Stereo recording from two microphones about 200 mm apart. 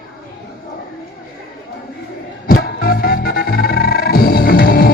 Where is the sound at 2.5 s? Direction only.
50° left (ahead or behind).